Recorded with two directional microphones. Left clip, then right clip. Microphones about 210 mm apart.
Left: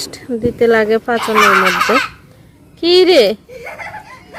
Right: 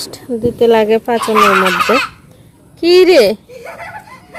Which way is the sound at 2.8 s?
10° right (ahead or behind).